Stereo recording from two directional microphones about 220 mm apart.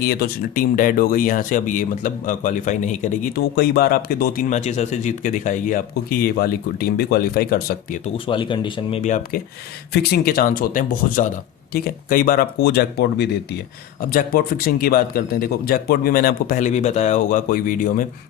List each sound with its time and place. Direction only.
0.0 s speech: 45° left (ahead or behind)
8.0 s speech: 20° left (ahead or behind)
9.0 s speech: 35° left (ahead or behind)
9.9 s speech: 45° left (ahead or behind)